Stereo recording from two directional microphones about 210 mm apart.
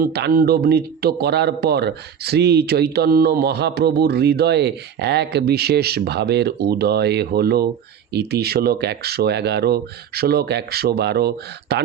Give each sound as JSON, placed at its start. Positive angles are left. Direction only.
{"t": 0.0, "sound": "speech", "side_deg": -45}